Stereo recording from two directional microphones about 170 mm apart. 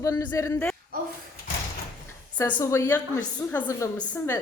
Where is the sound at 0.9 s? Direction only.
60° right (ahead or behind).